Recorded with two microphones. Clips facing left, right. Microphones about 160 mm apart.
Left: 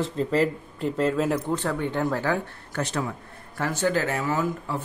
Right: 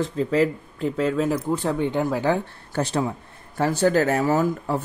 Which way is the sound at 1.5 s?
15° right (ahead or behind).